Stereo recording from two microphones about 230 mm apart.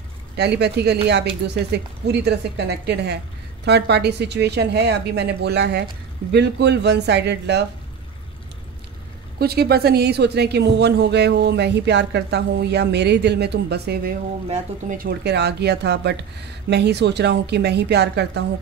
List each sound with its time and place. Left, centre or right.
0.4 s speech: right
9.4 s speech: right